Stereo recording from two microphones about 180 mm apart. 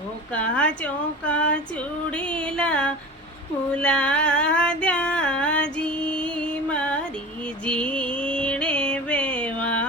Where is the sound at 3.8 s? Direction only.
5° left (ahead or behind).